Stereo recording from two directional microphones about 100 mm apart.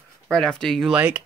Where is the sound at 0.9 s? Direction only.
10° right (ahead or behind).